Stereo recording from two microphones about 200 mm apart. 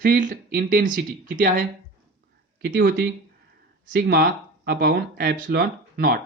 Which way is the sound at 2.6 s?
45° right (ahead or behind).